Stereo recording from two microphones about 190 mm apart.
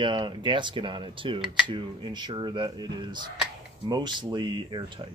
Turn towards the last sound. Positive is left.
turn(degrees=-25)  # may be behind; listen again after turning